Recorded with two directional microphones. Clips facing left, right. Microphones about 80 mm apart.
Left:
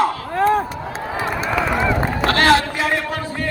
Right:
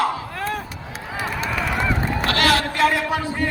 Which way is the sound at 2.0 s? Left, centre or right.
Left.